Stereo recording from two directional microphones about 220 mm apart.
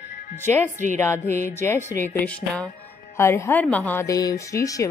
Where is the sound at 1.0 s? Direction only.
10° left (ahead or behind).